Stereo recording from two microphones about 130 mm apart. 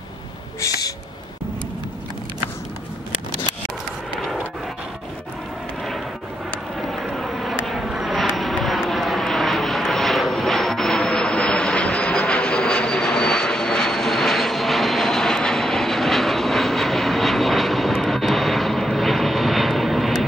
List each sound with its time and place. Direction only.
0.6 s owl: 25° left (ahead or behind)
6.8 s vehicle: centre (ahead or behind)